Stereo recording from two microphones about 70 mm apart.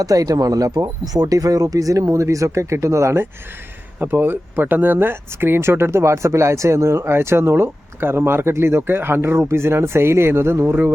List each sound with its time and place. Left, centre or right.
0.0 s speech: right
4.0 s speech: right